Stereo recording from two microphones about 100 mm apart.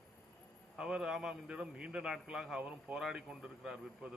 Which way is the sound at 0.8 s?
5° right (ahead or behind).